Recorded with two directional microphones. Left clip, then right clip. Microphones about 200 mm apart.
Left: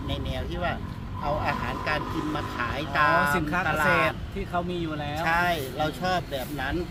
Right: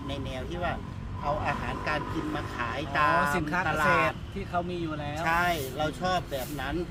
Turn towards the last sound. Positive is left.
turn(degrees=5)  # may be behind; listen again after turning